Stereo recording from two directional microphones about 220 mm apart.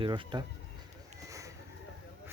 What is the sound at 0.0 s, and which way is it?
Speech, 20° right (ahead or behind).